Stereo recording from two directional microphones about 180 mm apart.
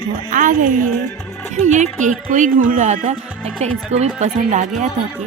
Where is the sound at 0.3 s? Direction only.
45° right (ahead or behind).